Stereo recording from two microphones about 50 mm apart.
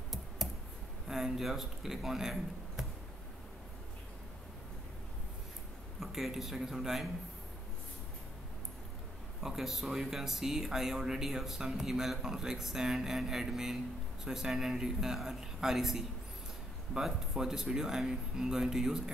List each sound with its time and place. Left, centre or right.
1.0 s speech: centre
5.9 s speech: centre
9.4 s speech: centre